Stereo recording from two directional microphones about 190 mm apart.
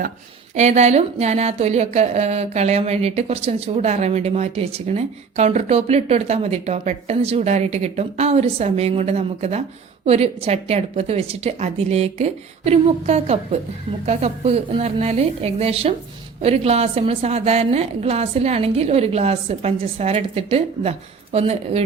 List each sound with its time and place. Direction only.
0.5 s speech: 35° right (ahead or behind)